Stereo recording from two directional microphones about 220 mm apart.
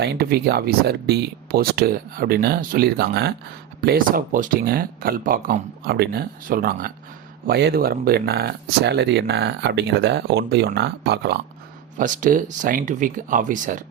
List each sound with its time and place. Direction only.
0.0 s speech: 45° right (ahead or behind)
11.9 s speech: 35° right (ahead or behind)